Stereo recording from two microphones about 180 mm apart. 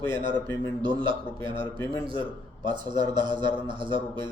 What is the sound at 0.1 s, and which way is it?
A man's voice, 25° right (ahead or behind).